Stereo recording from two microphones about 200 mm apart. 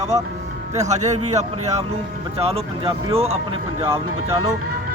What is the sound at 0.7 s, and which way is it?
Speech, 35° right (ahead or behind).